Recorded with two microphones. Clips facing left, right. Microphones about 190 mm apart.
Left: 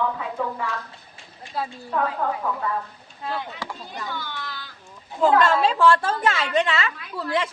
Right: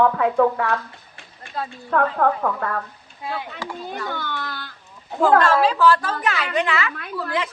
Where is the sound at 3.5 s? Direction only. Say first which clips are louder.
Right 4 dB; 55° right (ahead or behind).